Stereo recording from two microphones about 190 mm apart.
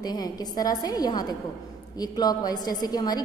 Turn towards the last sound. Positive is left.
turn(degrees=20)  # may be behind; listen again after turning